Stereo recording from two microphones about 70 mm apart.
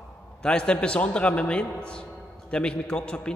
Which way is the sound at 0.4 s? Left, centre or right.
Centre.